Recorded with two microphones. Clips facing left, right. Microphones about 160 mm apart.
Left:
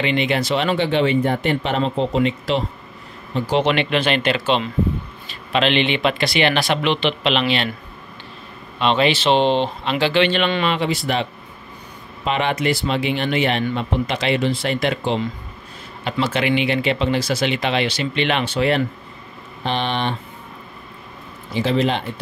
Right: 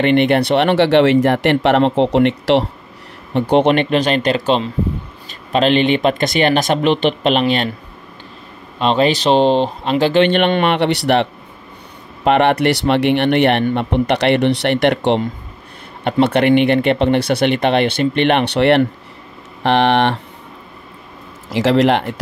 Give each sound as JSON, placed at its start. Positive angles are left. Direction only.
{"t": 0.0, "sound": "speech", "side_deg": -60}
{"t": 3.3, "sound": "speech", "side_deg": -60}
{"t": 8.7, "sound": "speech", "side_deg": -40}
{"t": 12.3, "sound": "speech", "side_deg": -65}
{"t": 16.0, "sound": "speech", "side_deg": -60}
{"t": 21.5, "sound": "a man's voice", "side_deg": -90}